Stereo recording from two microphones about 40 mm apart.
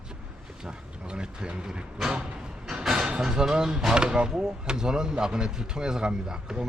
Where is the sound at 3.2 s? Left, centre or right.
Centre.